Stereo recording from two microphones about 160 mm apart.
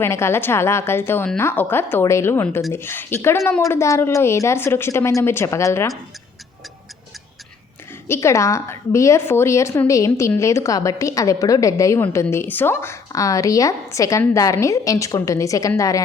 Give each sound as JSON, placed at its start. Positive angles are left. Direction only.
{"t": 0.0, "sound": "a woman's voice", "side_deg": 15}
{"t": 8.0, "sound": "a woman's voice", "side_deg": 15}